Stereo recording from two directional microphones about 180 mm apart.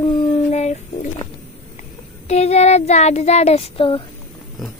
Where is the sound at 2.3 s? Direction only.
35° left (ahead or behind).